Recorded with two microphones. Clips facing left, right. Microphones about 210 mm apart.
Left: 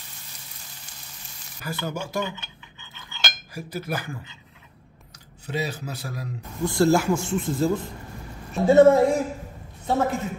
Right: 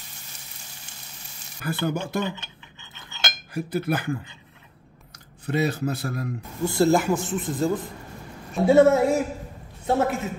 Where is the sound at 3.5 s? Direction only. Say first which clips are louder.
Right 6 dB; 55° right (ahead or behind).